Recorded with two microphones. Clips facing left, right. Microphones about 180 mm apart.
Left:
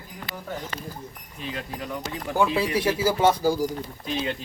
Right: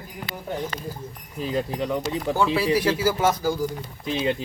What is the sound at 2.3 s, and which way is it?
Speech, 20° left (ahead or behind).